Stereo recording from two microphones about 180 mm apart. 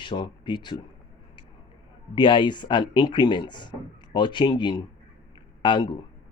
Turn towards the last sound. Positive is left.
turn(degrees=25)  # may be behind; listen again after turning